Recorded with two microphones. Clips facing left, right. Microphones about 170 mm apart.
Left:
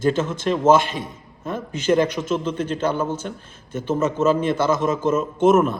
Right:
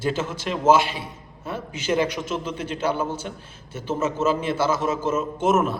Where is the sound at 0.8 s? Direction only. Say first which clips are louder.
Left 3 dB; 45° left (ahead or behind).